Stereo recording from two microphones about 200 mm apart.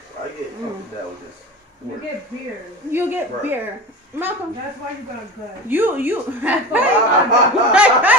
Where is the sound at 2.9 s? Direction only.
10° right (ahead or behind).